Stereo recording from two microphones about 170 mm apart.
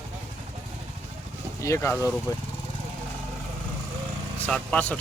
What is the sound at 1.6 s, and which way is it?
Speech, 15° left (ahead or behind).